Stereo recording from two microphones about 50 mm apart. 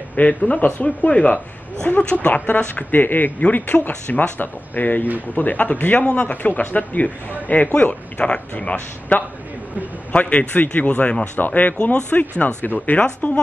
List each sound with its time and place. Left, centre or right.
0.1 s speech: left
0.6 s speech: left
0.8 s speech: left
11.3 s speech: left